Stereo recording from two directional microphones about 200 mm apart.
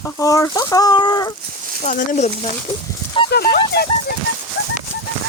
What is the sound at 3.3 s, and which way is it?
Speech, 50° left (ahead or behind).